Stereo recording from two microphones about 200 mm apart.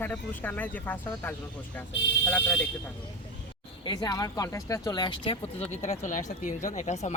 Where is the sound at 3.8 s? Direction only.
20° left (ahead or behind).